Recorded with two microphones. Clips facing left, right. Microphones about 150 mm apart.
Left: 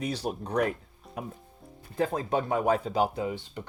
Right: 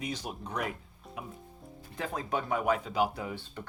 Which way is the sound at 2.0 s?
35° left (ahead or behind).